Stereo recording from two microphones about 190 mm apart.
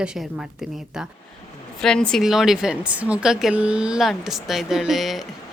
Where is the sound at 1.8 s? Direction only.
5° left (ahead or behind).